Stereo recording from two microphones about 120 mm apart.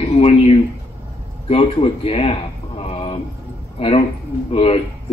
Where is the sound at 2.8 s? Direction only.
55° left (ahead or behind).